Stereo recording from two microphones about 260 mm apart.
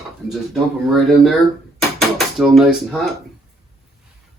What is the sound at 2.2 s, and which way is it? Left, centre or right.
Speech, centre.